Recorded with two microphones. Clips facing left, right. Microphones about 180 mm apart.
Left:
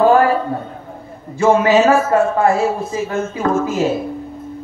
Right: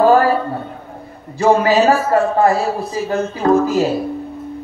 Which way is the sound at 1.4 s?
35° right (ahead or behind).